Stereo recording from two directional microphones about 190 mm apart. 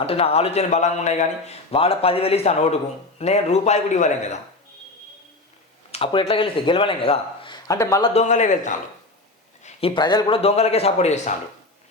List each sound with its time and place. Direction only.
0.0 s a man's voice: 30° left (ahead or behind)
5.9 s speech: 30° left (ahead or behind)
8.1 s a man's voice: 35° left (ahead or behind)
9.6 s a man's voice: 25° left (ahead or behind)